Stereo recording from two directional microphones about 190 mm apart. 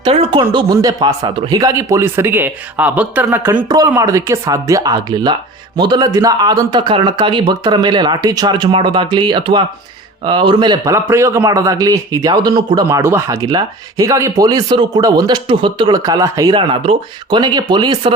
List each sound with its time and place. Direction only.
0.0 s a man's voice: 30° right (ahead or behind)